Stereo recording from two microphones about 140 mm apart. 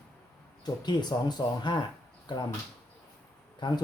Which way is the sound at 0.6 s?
30° left (ahead or behind).